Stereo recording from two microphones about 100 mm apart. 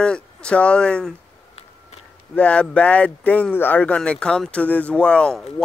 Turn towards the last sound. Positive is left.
turn(degrees=5)  # may be behind; listen again after turning